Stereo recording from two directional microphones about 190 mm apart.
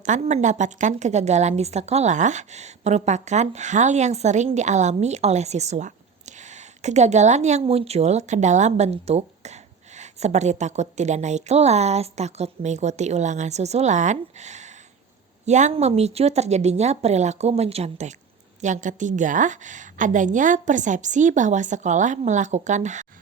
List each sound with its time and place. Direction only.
0.0 s a woman's voice: 40° right (ahead or behind)